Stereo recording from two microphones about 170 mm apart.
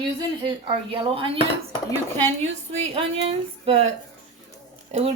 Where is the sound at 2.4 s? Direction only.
40° right (ahead or behind).